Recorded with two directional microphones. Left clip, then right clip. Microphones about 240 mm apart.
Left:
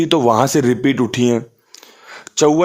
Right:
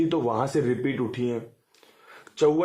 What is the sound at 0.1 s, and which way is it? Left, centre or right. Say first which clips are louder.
Speech: left 12 dB; left.